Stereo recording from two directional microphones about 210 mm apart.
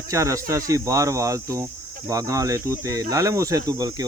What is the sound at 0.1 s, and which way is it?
Speech, 15° right (ahead or behind).